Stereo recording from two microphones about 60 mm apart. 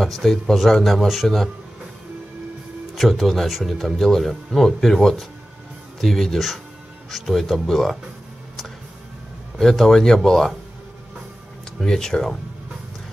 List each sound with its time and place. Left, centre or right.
0.0 s speech: centre
2.9 s speech: centre
9.6 s speech: centre
11.8 s speech: centre